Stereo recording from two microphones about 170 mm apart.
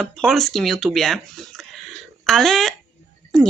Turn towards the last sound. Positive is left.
turn(degrees=5)  # may be behind; listen again after turning